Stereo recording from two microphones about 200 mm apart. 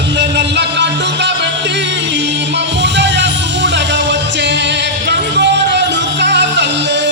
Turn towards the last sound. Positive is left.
turn(degrees=-60)  # may be behind; listen again after turning